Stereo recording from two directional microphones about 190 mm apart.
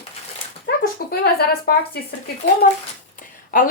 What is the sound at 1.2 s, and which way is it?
Speech, 55° left (ahead or behind).